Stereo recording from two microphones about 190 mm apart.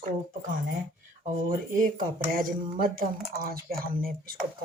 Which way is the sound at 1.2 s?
45° right (ahead or behind).